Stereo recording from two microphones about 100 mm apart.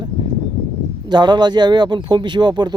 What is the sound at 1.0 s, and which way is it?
Speech, 50° right (ahead or behind).